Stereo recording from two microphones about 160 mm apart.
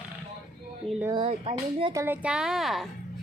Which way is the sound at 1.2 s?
35° right (ahead or behind).